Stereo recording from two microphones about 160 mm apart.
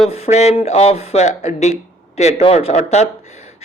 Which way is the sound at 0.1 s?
45° left (ahead or behind).